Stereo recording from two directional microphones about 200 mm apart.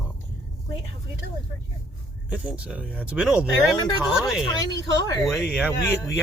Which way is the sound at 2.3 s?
5° right (ahead or behind).